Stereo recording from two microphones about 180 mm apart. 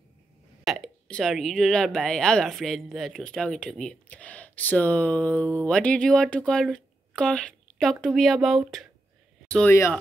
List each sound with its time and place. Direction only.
0.7 s speech: centre (ahead or behind)